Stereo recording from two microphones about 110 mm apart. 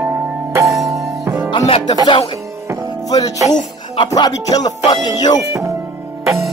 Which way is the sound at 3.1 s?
35° left (ahead or behind).